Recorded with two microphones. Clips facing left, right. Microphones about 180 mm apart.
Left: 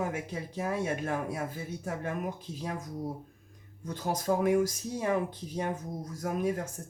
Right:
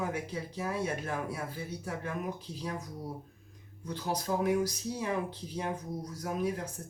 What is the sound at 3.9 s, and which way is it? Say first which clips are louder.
Speech: left 3 dB; 45° left (ahead or behind).